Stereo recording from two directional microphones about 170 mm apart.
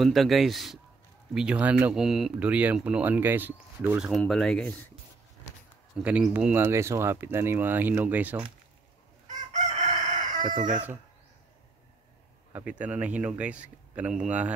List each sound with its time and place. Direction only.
0.0 s speech: centre (ahead or behind)
4.1 s speech: centre (ahead or behind)
6.0 s speech: 5° right (ahead or behind)
9.3 s chicken: 45° right (ahead or behind)
12.5 s speech: 10° right (ahead or behind)